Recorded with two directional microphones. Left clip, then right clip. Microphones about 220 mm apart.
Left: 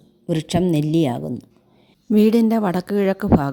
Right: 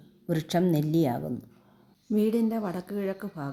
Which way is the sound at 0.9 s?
60° left (ahead or behind).